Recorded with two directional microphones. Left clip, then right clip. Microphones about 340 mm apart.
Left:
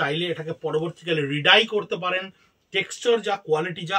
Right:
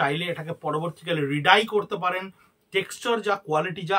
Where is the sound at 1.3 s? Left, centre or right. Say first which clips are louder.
Left 1 dB; right.